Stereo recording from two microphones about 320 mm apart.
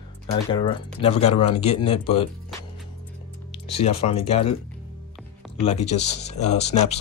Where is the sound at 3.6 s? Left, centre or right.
Centre.